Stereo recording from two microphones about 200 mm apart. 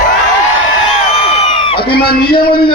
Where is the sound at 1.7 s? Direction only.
50° left (ahead or behind).